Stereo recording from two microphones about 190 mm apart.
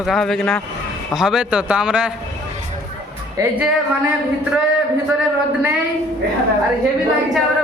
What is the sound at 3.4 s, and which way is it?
Speech, 20° right (ahead or behind).